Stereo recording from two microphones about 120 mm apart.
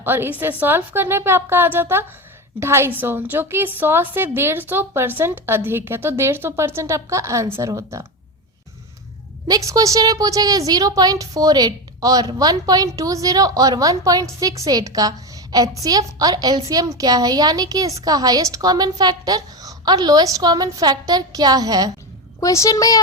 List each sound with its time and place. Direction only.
0.0 s a woman's voice: 15° right (ahead or behind)
9.5 s a woman's voice: 30° right (ahead or behind)
22.4 s a woman's voice: 25° left (ahead or behind)